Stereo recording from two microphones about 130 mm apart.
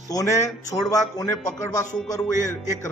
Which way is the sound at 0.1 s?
25° left (ahead or behind).